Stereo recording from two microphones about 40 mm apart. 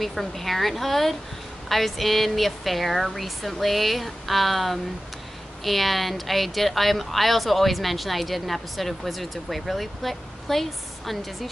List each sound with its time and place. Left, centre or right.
0.0 s speech: centre